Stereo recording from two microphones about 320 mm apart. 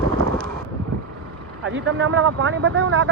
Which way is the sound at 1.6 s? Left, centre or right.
Right.